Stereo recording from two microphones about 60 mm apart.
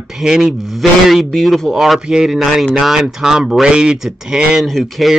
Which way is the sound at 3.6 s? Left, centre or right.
Centre.